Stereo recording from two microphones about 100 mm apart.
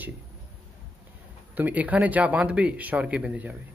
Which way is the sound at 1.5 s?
15° right (ahead or behind).